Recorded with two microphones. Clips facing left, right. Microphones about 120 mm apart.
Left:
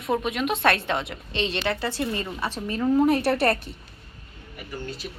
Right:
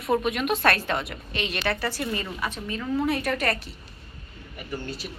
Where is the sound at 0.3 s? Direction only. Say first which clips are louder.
Even; 25° left (ahead or behind).